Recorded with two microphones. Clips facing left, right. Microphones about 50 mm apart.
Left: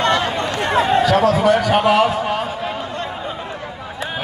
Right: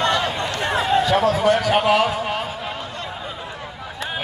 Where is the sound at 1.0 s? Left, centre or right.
Left.